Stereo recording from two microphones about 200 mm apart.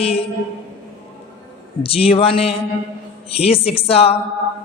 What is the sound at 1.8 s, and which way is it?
A woman's voice, 30° left (ahead or behind).